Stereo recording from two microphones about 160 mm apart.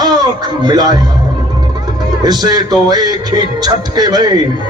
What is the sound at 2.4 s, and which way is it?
A man's voice, 25° right (ahead or behind).